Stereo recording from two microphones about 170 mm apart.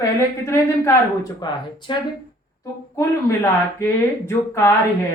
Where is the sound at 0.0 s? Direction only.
15° left (ahead or behind).